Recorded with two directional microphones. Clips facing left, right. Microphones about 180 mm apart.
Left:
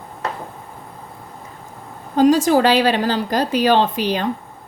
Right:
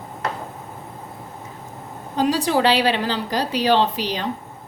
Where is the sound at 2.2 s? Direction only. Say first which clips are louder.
Left 6 dB; 45° left (ahead or behind).